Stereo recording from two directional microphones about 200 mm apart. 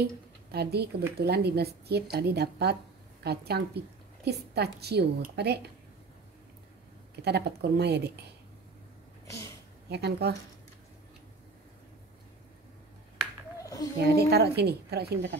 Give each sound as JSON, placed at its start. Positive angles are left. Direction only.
{"t": 0.0, "sound": "a woman's voice", "side_deg": -55}
{"t": 7.2, "sound": "a woman's voice", "side_deg": -55}
{"t": 9.8, "sound": "a woman's voice", "side_deg": -55}
{"t": 13.2, "sound": "finger snapping", "side_deg": -5}
{"t": 13.6, "sound": "a sound", "side_deg": 15}
{"t": 13.9, "sound": "a woman's voice", "side_deg": -55}